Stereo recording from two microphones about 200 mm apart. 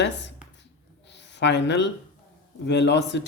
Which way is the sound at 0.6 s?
60° left (ahead or behind).